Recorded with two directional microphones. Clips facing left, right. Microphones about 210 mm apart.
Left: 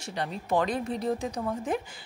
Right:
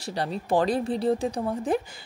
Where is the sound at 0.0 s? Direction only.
35° right (ahead or behind).